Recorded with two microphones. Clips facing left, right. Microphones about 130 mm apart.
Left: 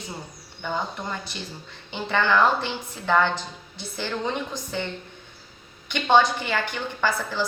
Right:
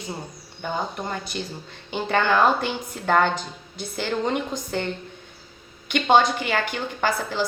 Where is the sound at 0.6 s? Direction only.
45° right (ahead or behind).